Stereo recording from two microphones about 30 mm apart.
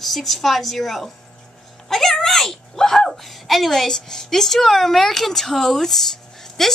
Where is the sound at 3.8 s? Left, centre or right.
Centre.